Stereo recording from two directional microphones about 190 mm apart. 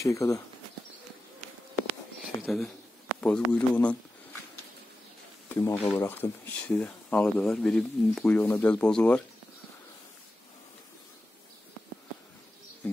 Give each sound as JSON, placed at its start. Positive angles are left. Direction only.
{"t": 0.0, "sound": "speech", "side_deg": 15}
{"t": 2.4, "sound": "speech", "side_deg": 0}
{"t": 5.5, "sound": "speech", "side_deg": 15}